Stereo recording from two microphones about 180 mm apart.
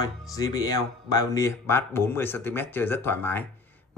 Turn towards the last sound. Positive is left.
turn(degrees=10)  # may be behind; listen again after turning